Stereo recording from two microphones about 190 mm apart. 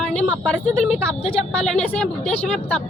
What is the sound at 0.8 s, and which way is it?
Speech, 30° left (ahead or behind).